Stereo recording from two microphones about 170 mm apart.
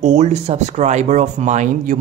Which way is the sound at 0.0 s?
40° right (ahead or behind).